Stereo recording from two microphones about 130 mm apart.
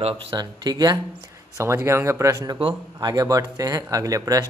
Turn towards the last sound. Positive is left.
turn(degrees=-25)  # may be behind; listen again after turning